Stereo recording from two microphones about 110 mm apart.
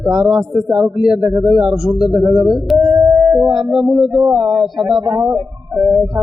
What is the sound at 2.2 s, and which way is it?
Speech, 50° right (ahead or behind).